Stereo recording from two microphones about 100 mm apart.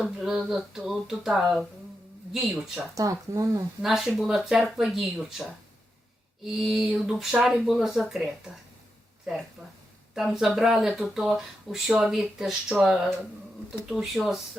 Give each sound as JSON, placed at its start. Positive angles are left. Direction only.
{"t": 0.0, "sound": "speech", "side_deg": -5}
{"t": 2.9, "sound": "speech", "side_deg": -35}
{"t": 3.8, "sound": "speech", "side_deg": -5}
{"t": 10.2, "sound": "speech", "side_deg": -5}